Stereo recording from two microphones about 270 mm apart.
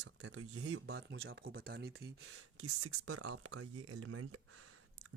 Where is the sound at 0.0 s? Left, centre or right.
Right.